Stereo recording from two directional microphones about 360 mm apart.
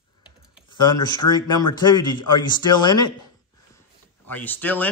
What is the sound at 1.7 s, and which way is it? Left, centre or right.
Speech, centre.